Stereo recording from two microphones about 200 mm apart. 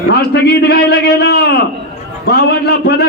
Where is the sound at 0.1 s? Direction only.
55° left (ahead or behind).